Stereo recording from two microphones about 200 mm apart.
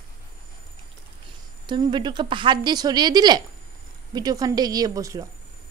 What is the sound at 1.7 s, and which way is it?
Speech, 25° right (ahead or behind).